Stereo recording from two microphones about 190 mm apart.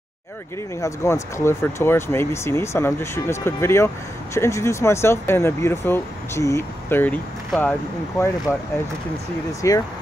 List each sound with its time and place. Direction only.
0.7 s speech: 15° left (ahead or behind)
9.6 s speech: 15° left (ahead or behind)